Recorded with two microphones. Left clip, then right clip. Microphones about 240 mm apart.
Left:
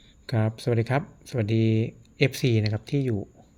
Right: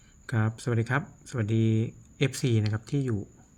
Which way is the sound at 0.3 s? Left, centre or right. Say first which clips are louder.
Left 4 dB; centre.